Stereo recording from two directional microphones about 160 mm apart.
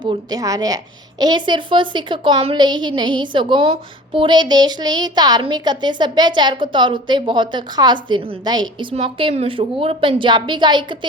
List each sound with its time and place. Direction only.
0.0 s a woman's voice: 25° right (ahead or behind)